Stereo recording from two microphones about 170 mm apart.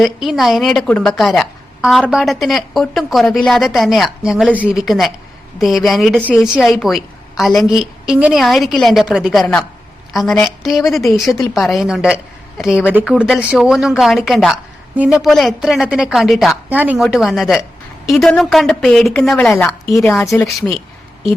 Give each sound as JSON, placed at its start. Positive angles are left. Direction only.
{"t": 0.0, "sound": "a woman's voice", "side_deg": 0}
{"t": 20.2, "sound": "a woman's voice", "side_deg": 15}